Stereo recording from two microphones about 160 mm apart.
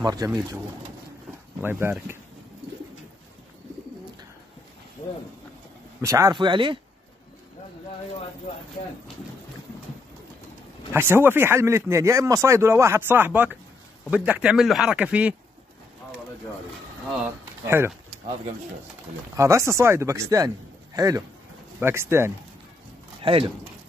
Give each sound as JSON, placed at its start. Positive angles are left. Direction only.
{"t": 0.0, "sound": "speech", "side_deg": -25}
{"t": 1.6, "sound": "speech", "side_deg": -15}
{"t": 5.9, "sound": "speech", "side_deg": -20}
{"t": 10.9, "sound": "speech", "side_deg": -15}
{"t": 17.6, "sound": "speech", "side_deg": -15}
{"t": 19.3, "sound": "speech", "side_deg": -20}
{"t": 23.2, "sound": "speech", "side_deg": -35}